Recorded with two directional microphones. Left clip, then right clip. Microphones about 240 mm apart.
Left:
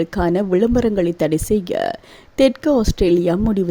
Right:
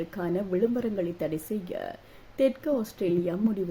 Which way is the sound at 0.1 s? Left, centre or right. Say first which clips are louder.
Left 12 dB; left.